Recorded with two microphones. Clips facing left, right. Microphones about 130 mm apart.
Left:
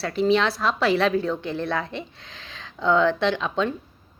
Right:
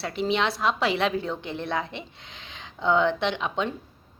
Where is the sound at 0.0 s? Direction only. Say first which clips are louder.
Left 5 dB; 20° right (ahead or behind).